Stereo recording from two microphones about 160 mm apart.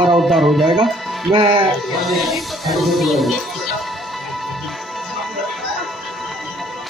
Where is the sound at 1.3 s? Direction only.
30° right (ahead or behind).